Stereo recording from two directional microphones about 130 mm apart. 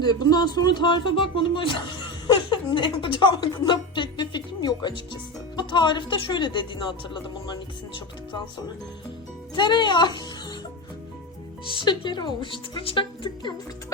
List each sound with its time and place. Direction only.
0.0 s speech: 30° left (ahead or behind)
9.6 s speech: 35° left (ahead or behind)
11.7 s speech: 35° left (ahead or behind)